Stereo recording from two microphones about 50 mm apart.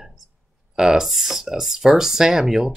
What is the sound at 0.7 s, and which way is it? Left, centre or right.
Speech, centre.